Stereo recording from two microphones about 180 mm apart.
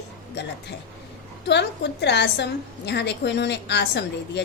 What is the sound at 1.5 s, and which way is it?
A woman's voice, 70° left (ahead or behind).